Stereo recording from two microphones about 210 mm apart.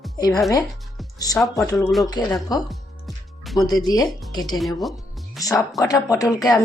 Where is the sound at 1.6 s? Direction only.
15° left (ahead or behind).